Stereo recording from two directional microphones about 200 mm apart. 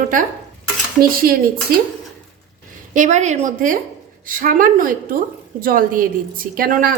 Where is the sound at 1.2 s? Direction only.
50° right (ahead or behind).